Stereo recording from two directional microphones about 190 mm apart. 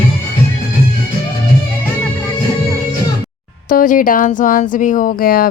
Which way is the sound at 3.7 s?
45° left (ahead or behind).